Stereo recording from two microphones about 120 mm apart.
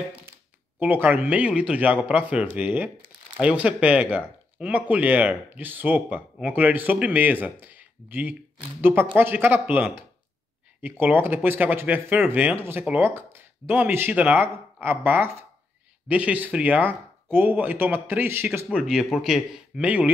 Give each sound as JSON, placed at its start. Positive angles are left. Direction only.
{"t": 0.7, "sound": "speech", "side_deg": -15}
{"t": 18.8, "sound": "speech", "side_deg": -5}